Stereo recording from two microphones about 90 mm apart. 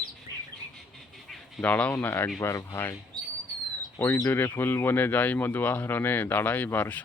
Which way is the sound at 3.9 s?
20° left (ahead or behind).